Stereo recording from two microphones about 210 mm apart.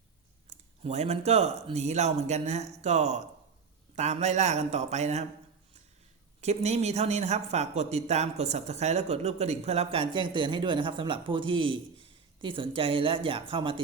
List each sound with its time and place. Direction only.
0.5 s speech: 30° right (ahead or behind)
6.4 s a woman's voice: 30° right (ahead or behind)